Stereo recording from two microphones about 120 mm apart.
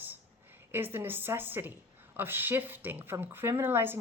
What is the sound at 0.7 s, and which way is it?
Speech, 20° right (ahead or behind).